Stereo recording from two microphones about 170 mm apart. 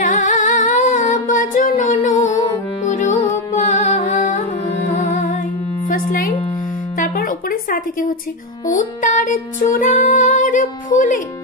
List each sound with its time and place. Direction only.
0.0 s humming: 50° left (ahead or behind)
2.9 s music: 45° left (ahead or behind)
7.0 s a sound: 55° left (ahead or behind)
8.6 s music: 50° left (ahead or behind)